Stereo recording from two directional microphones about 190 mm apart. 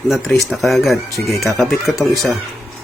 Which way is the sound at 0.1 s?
Centre (ahead or behind).